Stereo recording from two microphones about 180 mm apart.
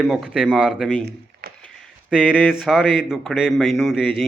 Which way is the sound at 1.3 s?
65° right (ahead or behind).